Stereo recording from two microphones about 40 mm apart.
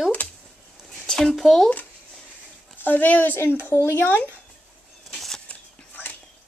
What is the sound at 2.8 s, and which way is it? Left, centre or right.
Speech, left.